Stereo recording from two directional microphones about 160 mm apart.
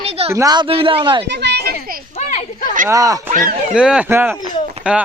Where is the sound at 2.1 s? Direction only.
45° left (ahead or behind).